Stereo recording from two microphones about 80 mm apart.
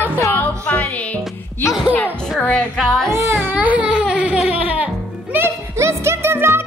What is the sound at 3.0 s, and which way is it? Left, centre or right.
Baby cry, right.